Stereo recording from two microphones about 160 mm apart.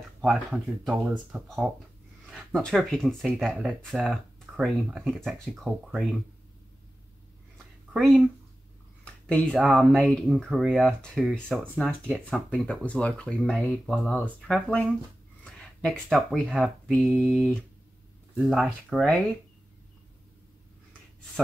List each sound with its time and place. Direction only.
0.2 s speech: 5° right (ahead or behind)
7.5 s a sound: centre (ahead or behind)
9.0 s speech: 5° left (ahead or behind)